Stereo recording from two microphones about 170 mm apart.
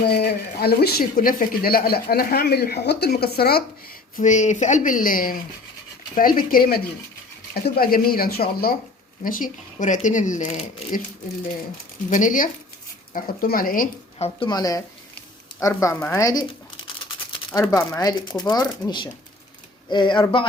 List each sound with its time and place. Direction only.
0.1 s speech: 70° left (ahead or behind)
4.2 s speech: 45° left (ahead or behind); by 8.7 s 65° left (ahead or behind)
9.2 s speech: 55° left (ahead or behind)
12.1 s speech: 50° left (ahead or behind)
14.2 s speech: 30° left (ahead or behind)